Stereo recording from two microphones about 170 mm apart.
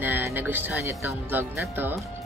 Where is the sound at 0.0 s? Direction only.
15° right (ahead or behind).